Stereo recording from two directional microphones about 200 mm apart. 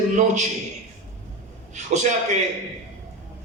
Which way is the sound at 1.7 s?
35° right (ahead or behind).